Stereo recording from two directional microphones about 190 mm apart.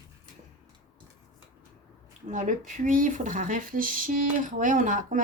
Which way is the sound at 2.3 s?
40° right (ahead or behind).